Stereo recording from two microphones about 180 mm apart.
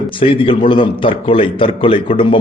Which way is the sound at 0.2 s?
30° left (ahead or behind).